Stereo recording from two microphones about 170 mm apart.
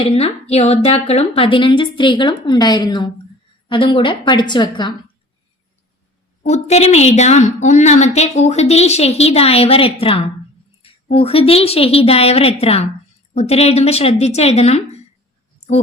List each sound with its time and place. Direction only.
0.0 s a woman's voice: 35° left (ahead or behind)
6.4 s a woman's voice: 40° left (ahead or behind)